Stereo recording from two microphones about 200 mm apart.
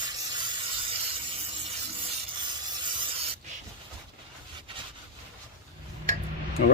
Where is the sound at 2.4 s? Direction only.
20° right (ahead or behind).